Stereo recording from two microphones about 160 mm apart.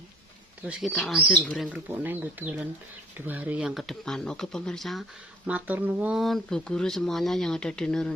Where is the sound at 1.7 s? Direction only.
10° right (ahead or behind).